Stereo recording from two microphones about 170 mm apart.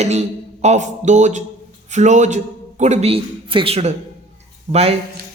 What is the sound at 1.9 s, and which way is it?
A man's voice, 45° right (ahead or behind).